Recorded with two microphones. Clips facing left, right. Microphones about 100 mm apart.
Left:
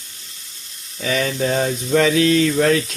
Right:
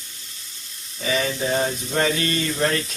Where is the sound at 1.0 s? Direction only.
70° left (ahead or behind).